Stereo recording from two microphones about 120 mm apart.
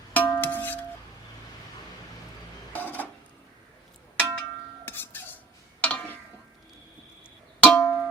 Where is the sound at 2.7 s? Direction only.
15° left (ahead or behind).